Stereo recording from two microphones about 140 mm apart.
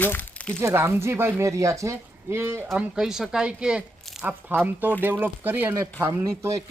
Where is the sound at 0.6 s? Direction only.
20° right (ahead or behind).